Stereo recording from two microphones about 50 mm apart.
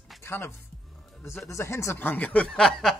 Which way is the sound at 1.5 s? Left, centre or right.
Left.